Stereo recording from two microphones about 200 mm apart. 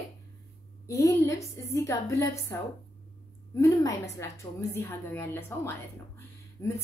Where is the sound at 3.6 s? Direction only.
15° left (ahead or behind).